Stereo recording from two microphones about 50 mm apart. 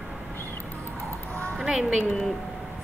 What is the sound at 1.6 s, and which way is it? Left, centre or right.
Music, centre.